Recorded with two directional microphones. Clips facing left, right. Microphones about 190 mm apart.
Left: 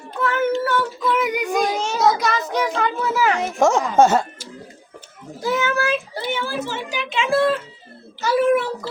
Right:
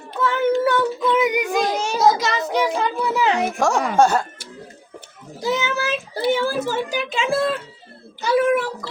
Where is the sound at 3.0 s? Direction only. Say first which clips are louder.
Even; 20° right (ahead or behind).